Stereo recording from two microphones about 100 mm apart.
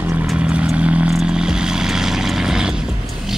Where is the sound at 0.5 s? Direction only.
10° right (ahead or behind).